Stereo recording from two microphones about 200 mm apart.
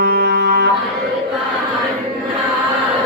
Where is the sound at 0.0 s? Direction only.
55° right (ahead or behind).